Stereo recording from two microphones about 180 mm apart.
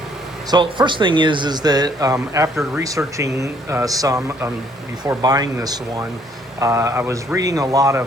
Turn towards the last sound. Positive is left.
turn(degrees=-20)  # may be behind; listen again after turning